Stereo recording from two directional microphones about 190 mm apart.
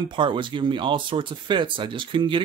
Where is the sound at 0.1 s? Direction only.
25° right (ahead or behind).